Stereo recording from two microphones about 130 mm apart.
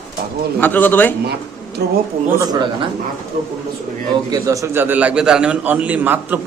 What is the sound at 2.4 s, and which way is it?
Speech, 30° right (ahead or behind).